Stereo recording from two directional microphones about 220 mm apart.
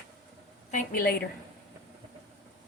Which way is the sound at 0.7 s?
40° left (ahead or behind).